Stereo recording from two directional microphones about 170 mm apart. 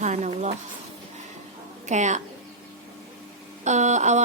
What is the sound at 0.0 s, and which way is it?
Speech, 45° right (ahead or behind).